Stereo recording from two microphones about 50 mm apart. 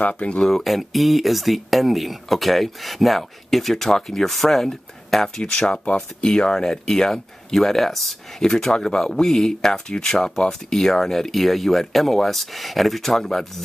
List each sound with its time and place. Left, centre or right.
0.1 s speech: centre
0.5 s speech: centre